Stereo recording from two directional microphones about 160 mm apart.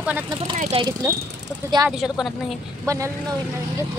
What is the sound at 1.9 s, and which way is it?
Speech, centre (ahead or behind).